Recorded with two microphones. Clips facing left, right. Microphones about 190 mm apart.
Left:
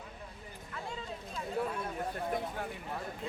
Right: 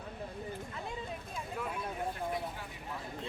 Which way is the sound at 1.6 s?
35° left (ahead or behind).